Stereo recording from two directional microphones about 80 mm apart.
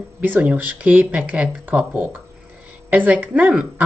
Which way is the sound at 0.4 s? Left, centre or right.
Centre.